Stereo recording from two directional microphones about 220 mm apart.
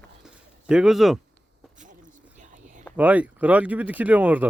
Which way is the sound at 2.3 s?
35° right (ahead or behind).